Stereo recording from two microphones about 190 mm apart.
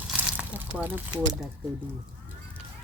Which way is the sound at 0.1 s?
5° right (ahead or behind).